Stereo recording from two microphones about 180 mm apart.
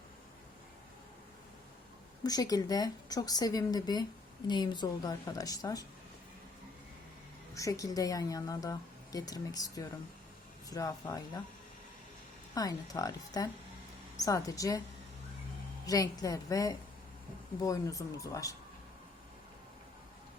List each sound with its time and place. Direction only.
2.2 s a woman's voice: 20° left (ahead or behind)
7.5 s a woman's voice: 20° left (ahead or behind)
12.5 s a woman's voice: 20° left (ahead or behind)
15.9 s a woman's voice: 20° left (ahead or behind)